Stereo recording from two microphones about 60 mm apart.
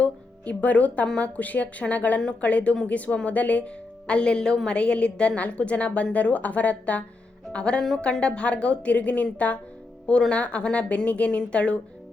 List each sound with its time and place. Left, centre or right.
0.0 s music: left
1.0 s speech: centre
1.4 s a woman's voice: left